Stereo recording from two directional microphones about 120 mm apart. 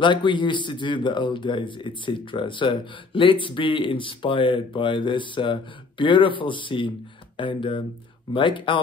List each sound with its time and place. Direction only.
0.0 s speech: 40° left (ahead or behind)